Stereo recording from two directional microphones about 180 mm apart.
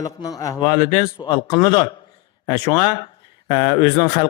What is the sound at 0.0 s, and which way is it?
Speech, 20° left (ahead or behind).